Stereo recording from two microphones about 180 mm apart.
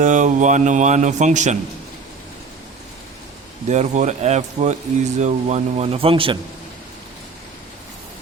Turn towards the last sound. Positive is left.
turn(degrees=-30)  # may be behind; listen again after turning